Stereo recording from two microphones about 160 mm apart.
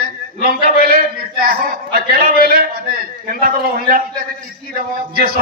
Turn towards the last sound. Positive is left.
turn(degrees=-65)  # may be behind; listen again after turning